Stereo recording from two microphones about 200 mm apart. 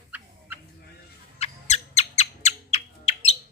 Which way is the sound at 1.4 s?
30° left (ahead or behind).